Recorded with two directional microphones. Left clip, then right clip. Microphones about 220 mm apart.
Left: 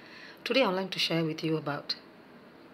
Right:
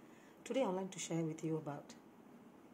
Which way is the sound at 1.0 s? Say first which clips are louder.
Left 13 dB; 5° right (ahead or behind).